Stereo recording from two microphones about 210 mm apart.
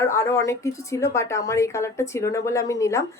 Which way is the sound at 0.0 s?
15° left (ahead or behind).